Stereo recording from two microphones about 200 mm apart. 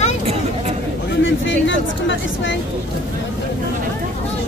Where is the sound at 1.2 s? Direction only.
70° left (ahead or behind).